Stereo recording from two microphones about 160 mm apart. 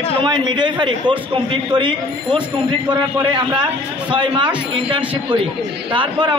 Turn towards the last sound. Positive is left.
turn(degrees=-30)  # may be behind; listen again after turning